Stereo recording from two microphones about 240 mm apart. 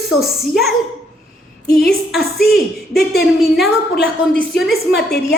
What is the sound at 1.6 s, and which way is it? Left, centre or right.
Speech, left.